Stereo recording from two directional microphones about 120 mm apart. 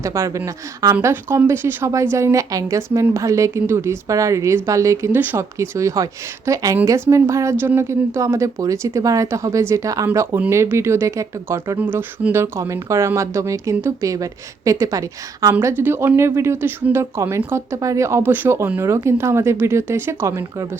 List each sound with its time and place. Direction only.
0.0 s a woman's voice: 25° right (ahead or behind)
10.1 s a woman's voice: 15° right (ahead or behind)